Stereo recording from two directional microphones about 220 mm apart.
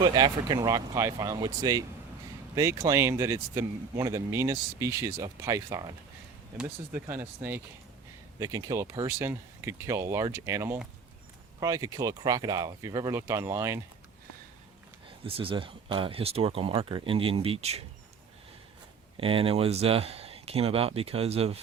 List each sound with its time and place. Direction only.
0.0 s speech: 20° right (ahead or behind)
15.2 s speech: 25° right (ahead or behind)
19.1 s speech: 25° right (ahead or behind)